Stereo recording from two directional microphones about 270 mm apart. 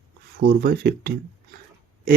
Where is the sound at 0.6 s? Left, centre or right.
Right.